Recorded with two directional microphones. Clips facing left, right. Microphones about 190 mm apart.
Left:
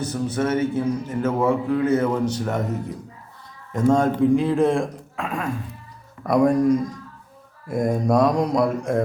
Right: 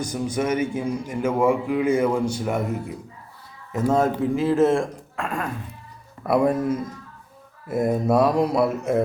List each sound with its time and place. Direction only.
0.0 s a man's voice: 10° right (ahead or behind)